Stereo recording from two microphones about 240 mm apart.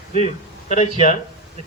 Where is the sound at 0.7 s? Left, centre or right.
Left.